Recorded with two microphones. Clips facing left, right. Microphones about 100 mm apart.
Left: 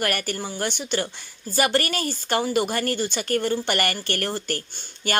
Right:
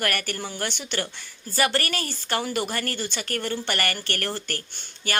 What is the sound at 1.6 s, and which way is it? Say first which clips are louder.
Speech: left 2 dB; 15° left (ahead or behind).